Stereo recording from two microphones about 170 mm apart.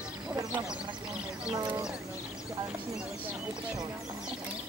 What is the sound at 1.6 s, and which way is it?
Speech, 25° right (ahead or behind).